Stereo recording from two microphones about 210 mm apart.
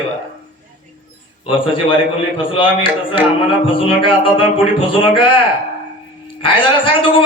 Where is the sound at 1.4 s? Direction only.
25° left (ahead or behind).